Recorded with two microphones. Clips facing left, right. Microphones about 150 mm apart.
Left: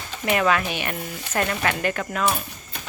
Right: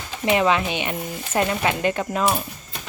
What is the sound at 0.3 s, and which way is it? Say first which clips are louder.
Speech: right 2 dB; 25° right (ahead or behind).